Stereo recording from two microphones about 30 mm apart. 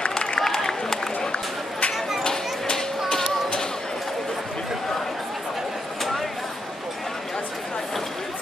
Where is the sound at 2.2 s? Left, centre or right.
Left.